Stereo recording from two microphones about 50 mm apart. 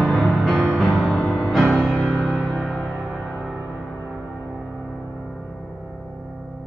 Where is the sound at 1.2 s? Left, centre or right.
Centre.